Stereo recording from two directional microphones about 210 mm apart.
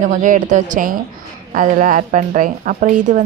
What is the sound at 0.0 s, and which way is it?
A woman's voice, 40° right (ahead or behind).